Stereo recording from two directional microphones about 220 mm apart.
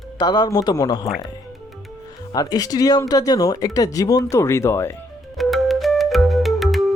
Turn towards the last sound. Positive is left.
turn(degrees=0)  # may be behind; listen again after turning